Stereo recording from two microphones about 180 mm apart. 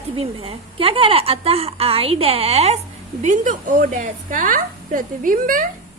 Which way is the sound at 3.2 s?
45° right (ahead or behind).